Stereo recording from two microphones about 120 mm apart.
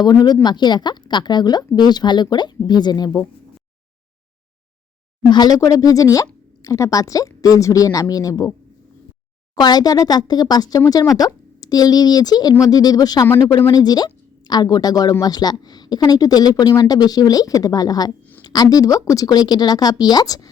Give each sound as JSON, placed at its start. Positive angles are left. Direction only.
{"t": 0.0, "sound": "speech", "side_deg": 35}
{"t": 5.3, "sound": "speech", "side_deg": 35}
{"t": 9.6, "sound": "speech", "side_deg": 35}